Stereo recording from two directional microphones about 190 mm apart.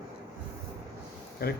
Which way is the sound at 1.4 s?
55° left (ahead or behind).